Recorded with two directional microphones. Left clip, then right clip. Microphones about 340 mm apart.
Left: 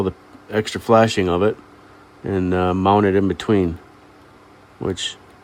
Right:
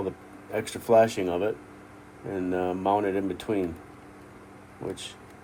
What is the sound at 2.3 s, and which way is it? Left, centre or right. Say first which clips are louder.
Speech: left 9 dB; left.